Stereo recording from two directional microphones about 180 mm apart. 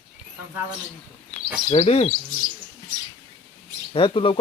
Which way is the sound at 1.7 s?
35° left (ahead or behind).